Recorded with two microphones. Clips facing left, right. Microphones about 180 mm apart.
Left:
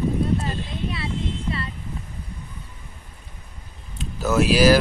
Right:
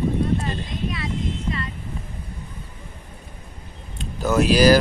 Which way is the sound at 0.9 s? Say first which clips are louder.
Right 1 dB; 30° left (ahead or behind).